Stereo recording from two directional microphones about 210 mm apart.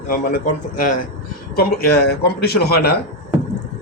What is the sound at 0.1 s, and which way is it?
Speech, 40° left (ahead or behind).